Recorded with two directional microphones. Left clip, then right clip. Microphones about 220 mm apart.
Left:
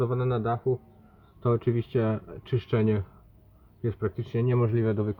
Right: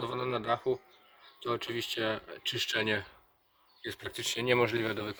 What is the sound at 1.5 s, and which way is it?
Speech, 5° right (ahead or behind).